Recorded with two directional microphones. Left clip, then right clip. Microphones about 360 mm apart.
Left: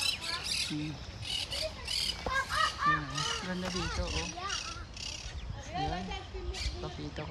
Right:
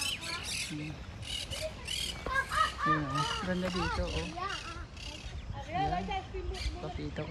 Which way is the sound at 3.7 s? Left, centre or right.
Centre.